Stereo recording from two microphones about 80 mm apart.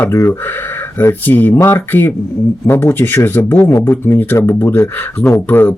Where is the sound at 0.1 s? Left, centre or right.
Left.